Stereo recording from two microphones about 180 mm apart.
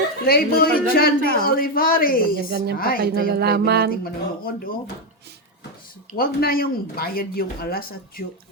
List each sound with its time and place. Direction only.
0.3 s a man's voice: 60° left (ahead or behind)
3.0 s a sound: 65° right (ahead or behind)
4.0 s a man's voice: 55° left (ahead or behind)
6.1 s a man's voice: 55° left (ahead or behind)